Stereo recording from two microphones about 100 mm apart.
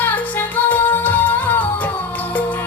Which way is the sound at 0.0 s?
20° left (ahead or behind).